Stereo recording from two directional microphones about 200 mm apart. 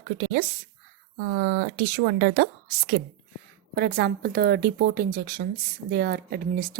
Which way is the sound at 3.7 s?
50° right (ahead or behind).